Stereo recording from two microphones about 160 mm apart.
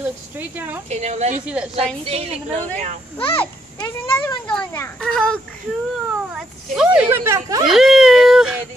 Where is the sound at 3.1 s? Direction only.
35° left (ahead or behind).